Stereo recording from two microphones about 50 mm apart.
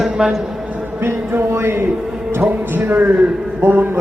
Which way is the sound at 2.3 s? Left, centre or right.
Right.